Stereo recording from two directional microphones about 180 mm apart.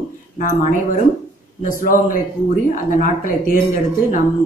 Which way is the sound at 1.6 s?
50° left (ahead or behind).